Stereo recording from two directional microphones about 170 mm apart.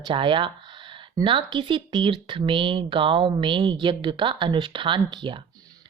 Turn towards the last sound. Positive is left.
turn(degrees=-25)  # may be behind; listen again after turning